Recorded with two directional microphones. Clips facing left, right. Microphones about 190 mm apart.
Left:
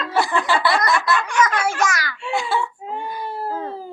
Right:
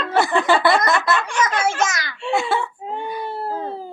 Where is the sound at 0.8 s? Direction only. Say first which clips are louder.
Right 1 dB; 20° right (ahead or behind).